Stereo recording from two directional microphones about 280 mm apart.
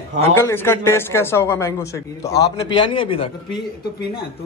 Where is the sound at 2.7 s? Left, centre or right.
Centre.